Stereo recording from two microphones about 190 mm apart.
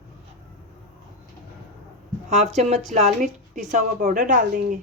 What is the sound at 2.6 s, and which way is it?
Speech, 35° right (ahead or behind).